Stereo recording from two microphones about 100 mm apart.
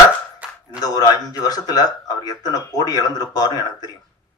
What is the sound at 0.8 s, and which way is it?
Speech, 40° left (ahead or behind).